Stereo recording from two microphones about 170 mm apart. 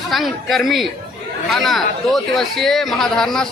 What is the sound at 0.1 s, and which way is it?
A man's voice, centre (ahead or behind).